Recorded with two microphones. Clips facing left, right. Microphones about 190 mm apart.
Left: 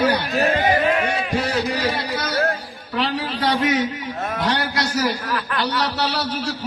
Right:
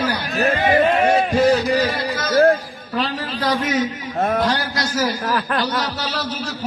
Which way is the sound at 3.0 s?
65° left (ahead or behind).